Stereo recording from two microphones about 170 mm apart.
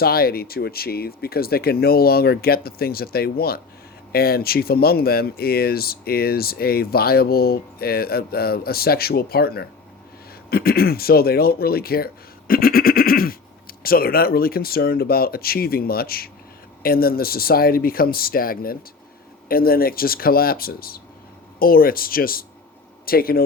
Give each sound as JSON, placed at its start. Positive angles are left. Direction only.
{"t": 0.0, "sound": "speech", "side_deg": 65}